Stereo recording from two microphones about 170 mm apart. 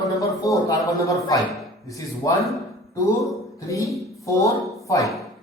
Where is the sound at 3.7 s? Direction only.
20° left (ahead or behind).